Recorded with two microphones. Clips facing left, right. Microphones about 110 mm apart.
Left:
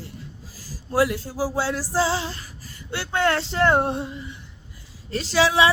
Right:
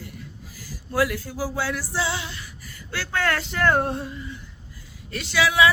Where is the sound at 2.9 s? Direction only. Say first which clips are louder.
Left 3 dB; 20° left (ahead or behind).